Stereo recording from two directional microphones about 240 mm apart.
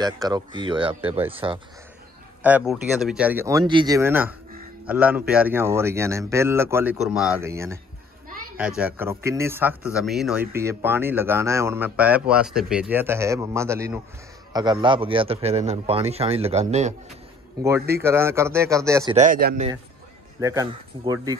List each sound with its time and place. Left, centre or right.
0.0 s speech: centre
2.4 s speech: centre; by 16.9 s right
18.0 s speech: centre
19.1 s speech: right
20.3 s speech: centre